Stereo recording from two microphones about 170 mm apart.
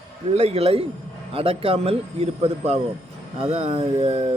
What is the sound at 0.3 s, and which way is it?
Speech, 40° right (ahead or behind).